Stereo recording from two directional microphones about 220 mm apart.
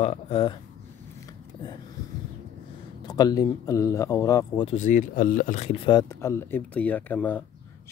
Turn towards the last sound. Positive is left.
turn(degrees=10)  # may be behind; listen again after turning